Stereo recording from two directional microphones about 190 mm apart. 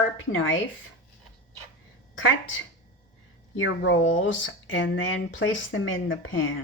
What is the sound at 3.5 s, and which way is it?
Speech, 90° left.